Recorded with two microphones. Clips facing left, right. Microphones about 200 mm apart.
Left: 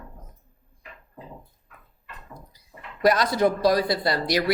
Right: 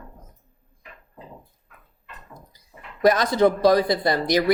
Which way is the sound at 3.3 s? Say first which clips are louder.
Right 3 dB; 20° right (ahead or behind).